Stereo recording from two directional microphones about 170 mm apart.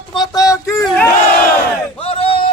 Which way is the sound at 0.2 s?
20° left (ahead or behind).